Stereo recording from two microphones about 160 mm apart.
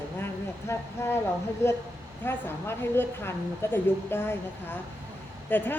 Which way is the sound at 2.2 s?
15° left (ahead or behind).